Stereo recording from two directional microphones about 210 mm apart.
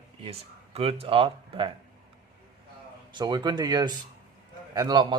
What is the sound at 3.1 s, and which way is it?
Speech, 20° right (ahead or behind).